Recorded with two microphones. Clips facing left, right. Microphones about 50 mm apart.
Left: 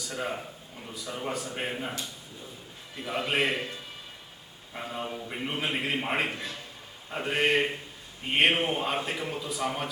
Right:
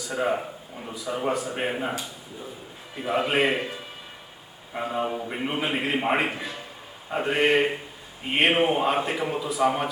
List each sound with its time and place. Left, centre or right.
0.0 s speech: centre
0.3 s speech: right
0.9 s a man's voice: centre